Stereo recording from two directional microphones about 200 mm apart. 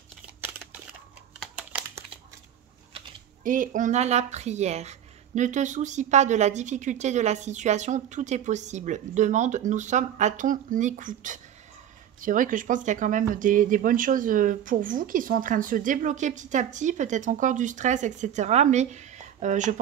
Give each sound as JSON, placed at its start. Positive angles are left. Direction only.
{"t": 1.4, "sound": "computer keyboard", "side_deg": -5}
{"t": 3.4, "sound": "speech", "side_deg": -40}